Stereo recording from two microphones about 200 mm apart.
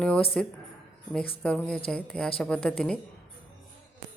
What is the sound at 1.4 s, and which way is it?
A woman's voice, 5° left (ahead or behind).